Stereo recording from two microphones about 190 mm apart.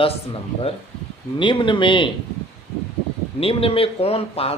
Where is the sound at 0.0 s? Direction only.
30° left (ahead or behind).